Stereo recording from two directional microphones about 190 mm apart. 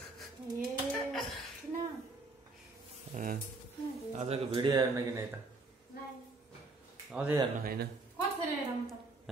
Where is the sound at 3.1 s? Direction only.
45° right (ahead or behind).